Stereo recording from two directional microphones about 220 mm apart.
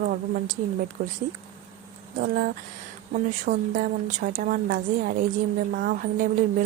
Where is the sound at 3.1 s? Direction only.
35° right (ahead or behind).